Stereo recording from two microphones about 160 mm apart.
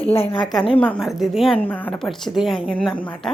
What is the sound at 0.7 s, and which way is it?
A woman's voice, 10° left (ahead or behind).